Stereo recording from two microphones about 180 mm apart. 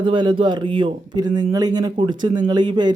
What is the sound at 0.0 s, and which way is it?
Speech, 25° right (ahead or behind).